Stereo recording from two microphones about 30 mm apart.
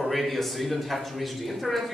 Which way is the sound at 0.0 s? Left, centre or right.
Centre.